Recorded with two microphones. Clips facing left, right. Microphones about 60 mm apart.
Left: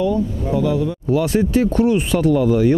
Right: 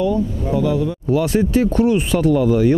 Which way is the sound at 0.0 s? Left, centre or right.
Centre.